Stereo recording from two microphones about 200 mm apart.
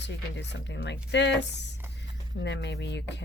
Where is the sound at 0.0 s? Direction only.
60° left (ahead or behind).